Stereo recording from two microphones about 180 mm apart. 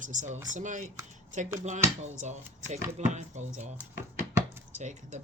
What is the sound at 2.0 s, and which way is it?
Speech, 40° right (ahead or behind).